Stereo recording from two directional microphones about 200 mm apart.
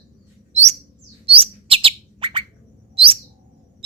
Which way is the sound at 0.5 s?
35° right (ahead or behind).